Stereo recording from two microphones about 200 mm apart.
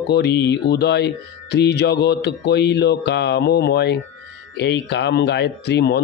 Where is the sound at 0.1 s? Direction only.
55° left (ahead or behind).